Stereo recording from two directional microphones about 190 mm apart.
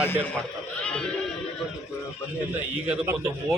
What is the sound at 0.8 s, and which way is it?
Speech, 5° left (ahead or behind).